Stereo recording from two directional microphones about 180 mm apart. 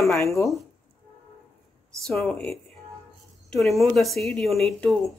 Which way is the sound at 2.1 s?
Centre (ahead or behind).